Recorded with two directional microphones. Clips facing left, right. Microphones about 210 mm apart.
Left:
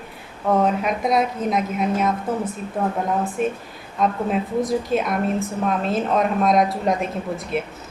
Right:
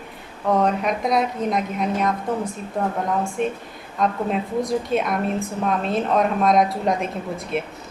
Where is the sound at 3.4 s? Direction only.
5° left (ahead or behind).